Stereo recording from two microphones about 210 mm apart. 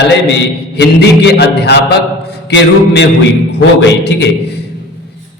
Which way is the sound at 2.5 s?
55° left (ahead or behind).